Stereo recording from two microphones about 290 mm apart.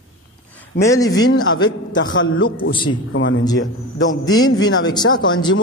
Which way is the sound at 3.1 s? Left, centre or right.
Left.